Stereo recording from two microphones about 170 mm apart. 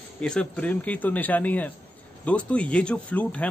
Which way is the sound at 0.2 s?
5° left (ahead or behind).